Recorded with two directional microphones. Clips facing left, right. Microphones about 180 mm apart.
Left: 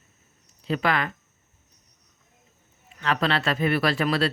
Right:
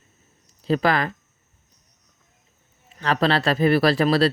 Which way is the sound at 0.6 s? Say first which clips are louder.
Right 4 dB; 35° right (ahead or behind).